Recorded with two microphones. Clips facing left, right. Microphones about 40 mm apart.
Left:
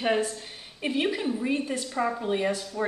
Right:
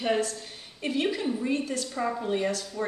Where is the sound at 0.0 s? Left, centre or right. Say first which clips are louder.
Left 1 dB; centre.